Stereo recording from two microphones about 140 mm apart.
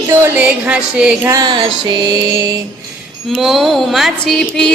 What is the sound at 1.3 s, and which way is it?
Music, 30° right (ahead or behind).